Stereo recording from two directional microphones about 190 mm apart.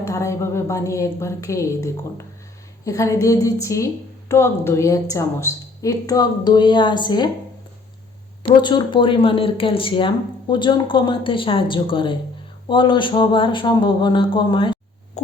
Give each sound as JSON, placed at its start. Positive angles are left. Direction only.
{"t": 0.0, "sound": "a woman's voice", "side_deg": 15}
{"t": 8.6, "sound": "speech", "side_deg": 25}